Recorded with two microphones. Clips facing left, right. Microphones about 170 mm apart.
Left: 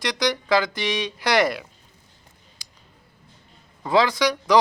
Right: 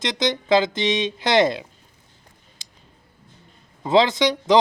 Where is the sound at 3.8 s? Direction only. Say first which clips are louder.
Right 2 dB; 25° right (ahead or behind).